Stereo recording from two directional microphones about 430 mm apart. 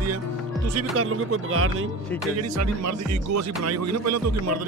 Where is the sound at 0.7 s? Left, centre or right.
Right.